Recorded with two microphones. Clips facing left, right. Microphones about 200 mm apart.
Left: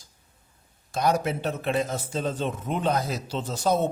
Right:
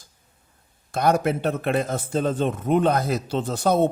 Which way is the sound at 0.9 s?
60° right (ahead or behind).